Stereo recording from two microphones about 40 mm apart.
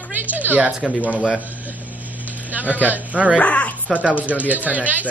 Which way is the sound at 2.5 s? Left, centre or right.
Right.